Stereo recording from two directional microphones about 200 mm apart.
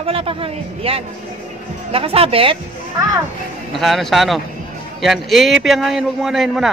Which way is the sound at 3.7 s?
Centre (ahead or behind).